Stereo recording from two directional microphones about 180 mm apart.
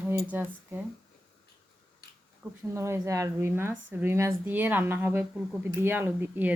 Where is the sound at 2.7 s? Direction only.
15° right (ahead or behind).